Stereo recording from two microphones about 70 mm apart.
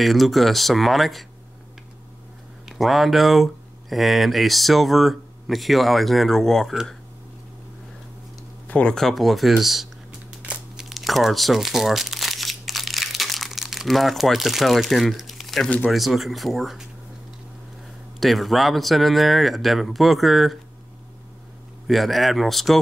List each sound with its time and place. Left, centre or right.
0.0 s speech: centre
2.6 s speech: centre
8.6 s a sound: centre
8.9 s speech: centre
10.8 s crumpling: centre
15.9 s speech: centre
18.2 s speech: centre
21.8 s speech: centre